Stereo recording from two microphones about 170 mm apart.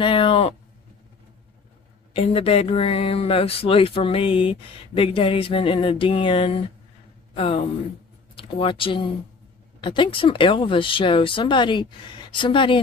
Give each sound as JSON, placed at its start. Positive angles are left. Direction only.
{"t": 0.0, "sound": "speech", "side_deg": 30}
{"t": 2.1, "sound": "speech", "side_deg": 35}